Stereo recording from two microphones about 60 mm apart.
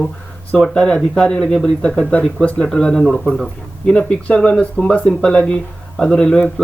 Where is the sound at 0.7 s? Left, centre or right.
Centre.